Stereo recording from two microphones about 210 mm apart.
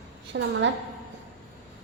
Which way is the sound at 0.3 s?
60° right (ahead or behind).